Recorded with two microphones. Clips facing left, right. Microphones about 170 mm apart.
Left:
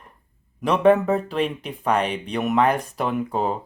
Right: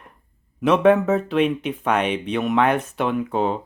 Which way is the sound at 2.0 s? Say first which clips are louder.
Right 2 dB; 35° left (ahead or behind).